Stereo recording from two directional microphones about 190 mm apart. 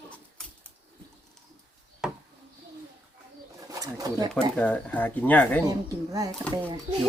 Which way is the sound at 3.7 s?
20° right (ahead or behind).